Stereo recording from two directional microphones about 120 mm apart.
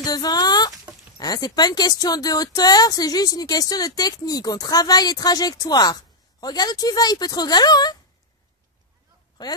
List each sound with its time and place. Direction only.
0.0 s chicken: 35° left (ahead or behind)
1.1 s speech: 35° left (ahead or behind)
9.4 s speech: 35° left (ahead or behind)